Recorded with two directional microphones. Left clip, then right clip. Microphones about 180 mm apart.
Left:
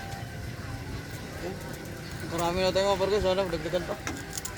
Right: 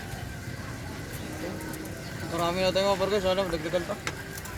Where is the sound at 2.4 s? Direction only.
20° left (ahead or behind).